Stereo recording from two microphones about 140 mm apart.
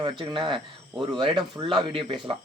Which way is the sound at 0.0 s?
35° right (ahead or behind).